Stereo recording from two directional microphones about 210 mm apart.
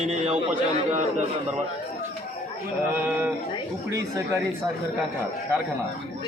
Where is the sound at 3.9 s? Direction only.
15° right (ahead or behind).